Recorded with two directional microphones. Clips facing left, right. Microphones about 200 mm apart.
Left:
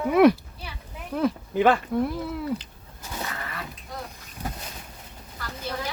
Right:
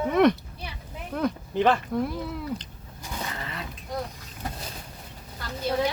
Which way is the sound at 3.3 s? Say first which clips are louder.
Even; 20° right (ahead or behind).